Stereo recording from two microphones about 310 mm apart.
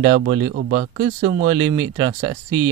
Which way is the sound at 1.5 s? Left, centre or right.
Centre.